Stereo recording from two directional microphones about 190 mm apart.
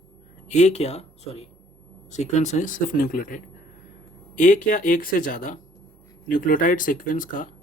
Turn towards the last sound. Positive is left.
turn(degrees=45)  # may be behind; listen again after turning